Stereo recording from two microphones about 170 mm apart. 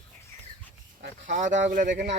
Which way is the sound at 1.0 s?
90° right.